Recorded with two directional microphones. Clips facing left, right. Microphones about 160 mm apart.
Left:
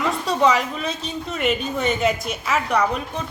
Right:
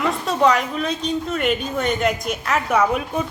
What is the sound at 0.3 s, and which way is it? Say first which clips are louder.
A woman's voice: right 1 dB; centre (ahead or behind).